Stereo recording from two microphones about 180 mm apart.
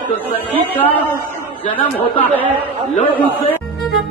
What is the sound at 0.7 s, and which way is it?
Speech, 10° left (ahead or behind).